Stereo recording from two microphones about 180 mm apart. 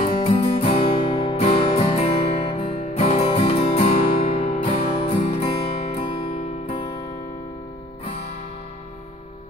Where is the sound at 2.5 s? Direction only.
40° left (ahead or behind).